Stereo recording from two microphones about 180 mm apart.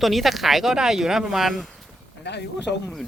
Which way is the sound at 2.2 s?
70° left (ahead or behind).